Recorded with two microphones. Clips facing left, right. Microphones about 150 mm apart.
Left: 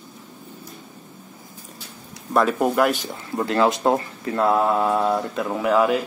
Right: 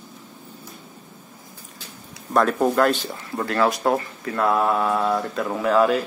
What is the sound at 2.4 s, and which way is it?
Speech, 5° left (ahead or behind).